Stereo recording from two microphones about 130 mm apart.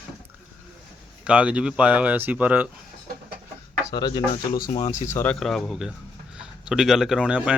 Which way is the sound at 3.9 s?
35° left (ahead or behind).